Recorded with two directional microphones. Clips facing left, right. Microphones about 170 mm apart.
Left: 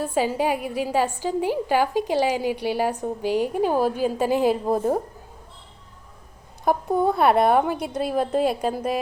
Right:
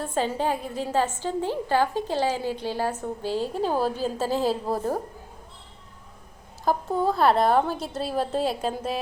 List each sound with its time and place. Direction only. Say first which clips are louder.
0.0 s a woman's voice: left 3 dB; 10° left (ahead or behind)
6.7 s a woman's voice: left 3 dB; 20° left (ahead or behind)